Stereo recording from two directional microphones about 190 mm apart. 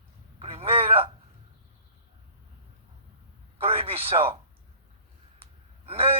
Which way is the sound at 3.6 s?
30° right (ahead or behind).